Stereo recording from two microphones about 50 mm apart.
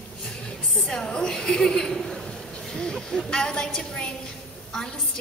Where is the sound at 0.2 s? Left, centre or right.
Centre.